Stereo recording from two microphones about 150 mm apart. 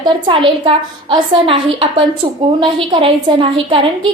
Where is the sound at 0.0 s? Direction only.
30° right (ahead or behind).